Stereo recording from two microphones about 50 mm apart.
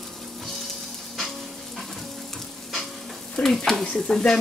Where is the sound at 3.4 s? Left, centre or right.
Left.